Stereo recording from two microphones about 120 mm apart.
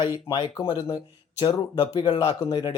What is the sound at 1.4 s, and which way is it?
Speech, 35° left (ahead or behind).